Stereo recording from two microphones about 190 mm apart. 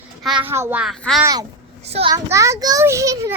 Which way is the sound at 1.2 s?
20° right (ahead or behind).